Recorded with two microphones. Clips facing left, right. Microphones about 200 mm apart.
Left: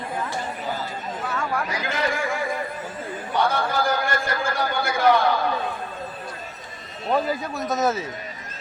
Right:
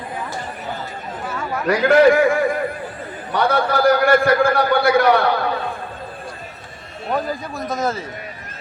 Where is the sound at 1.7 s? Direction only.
60° right (ahead or behind).